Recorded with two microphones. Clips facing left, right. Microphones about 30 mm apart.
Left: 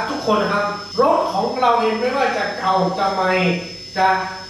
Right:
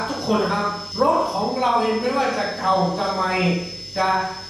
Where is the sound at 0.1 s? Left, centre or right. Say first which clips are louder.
Left 4 dB; left.